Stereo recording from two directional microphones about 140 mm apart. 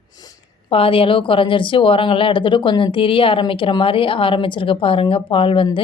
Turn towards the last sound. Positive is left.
turn(degrees=40)  # may be behind; listen again after turning